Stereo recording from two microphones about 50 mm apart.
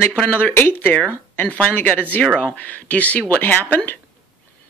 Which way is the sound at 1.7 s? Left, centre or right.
Left.